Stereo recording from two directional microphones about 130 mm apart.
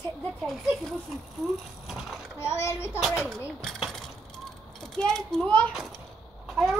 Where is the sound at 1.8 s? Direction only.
Centre (ahead or behind).